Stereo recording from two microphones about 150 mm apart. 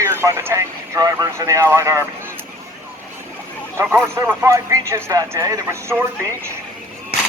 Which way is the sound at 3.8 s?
15° right (ahead or behind).